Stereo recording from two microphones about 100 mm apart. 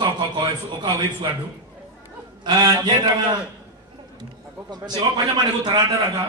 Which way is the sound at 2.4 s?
45° right (ahead or behind).